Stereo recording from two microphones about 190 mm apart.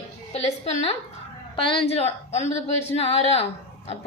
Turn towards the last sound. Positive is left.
turn(degrees=30)  # may be behind; listen again after turning